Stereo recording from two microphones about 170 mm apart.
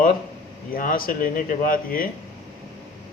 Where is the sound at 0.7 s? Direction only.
55° left (ahead or behind).